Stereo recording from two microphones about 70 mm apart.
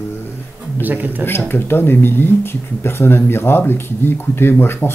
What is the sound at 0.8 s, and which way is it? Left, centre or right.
Speech, right.